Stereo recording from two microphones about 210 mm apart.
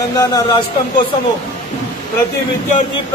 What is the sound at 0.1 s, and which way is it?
Speech, 15° left (ahead or behind).